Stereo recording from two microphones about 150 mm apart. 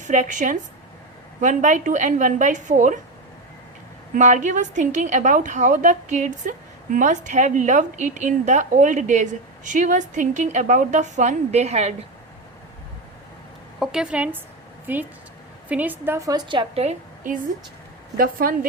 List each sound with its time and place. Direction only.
0.0 s a woman's voice: 55° right (ahead or behind)
4.1 s a woman's voice: 55° right (ahead or behind)
13.7 s a woman's voice: 5° right (ahead or behind); by 16.4 s 20° right (ahead or behind)
16.5 s a woman's voice: 40° right (ahead or behind)
18.2 s speech: 70° right (ahead or behind)